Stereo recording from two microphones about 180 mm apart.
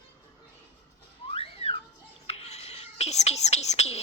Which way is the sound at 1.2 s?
30° left (ahead or behind).